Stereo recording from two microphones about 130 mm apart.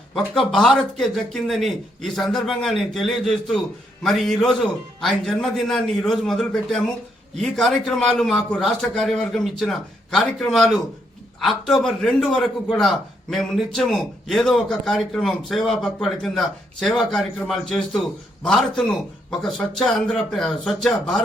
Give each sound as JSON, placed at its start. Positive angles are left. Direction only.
{"t": 0.1, "sound": "a man's voice", "side_deg": 5}